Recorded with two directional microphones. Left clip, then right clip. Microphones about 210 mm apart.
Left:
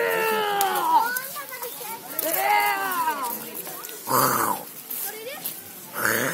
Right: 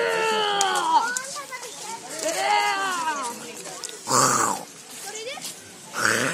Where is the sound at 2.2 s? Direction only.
20° right (ahead or behind).